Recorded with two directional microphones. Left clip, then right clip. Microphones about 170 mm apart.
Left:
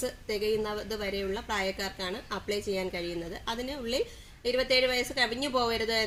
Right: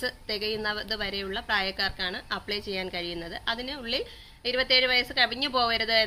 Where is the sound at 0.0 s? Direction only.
Centre (ahead or behind).